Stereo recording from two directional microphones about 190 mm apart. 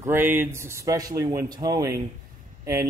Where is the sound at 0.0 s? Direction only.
10° right (ahead or behind).